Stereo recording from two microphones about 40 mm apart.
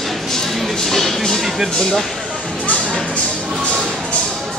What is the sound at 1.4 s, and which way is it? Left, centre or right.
Speech, centre.